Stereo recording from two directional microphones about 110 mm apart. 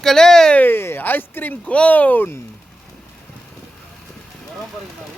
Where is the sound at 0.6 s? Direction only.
20° left (ahead or behind).